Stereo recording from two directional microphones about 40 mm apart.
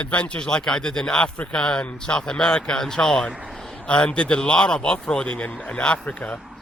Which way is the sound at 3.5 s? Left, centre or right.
Centre.